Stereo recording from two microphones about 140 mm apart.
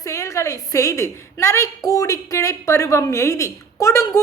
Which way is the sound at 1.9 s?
25° left (ahead or behind).